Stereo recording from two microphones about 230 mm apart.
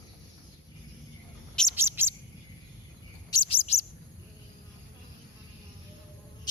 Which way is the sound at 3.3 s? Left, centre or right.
Left.